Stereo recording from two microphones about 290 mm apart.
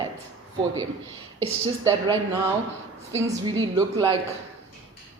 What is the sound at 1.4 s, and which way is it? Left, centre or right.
Speech, centre.